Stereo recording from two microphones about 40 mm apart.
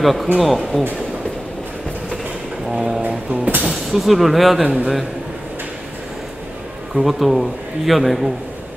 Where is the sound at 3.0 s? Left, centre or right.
Right.